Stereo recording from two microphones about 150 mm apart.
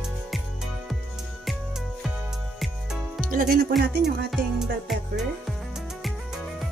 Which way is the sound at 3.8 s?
90° right.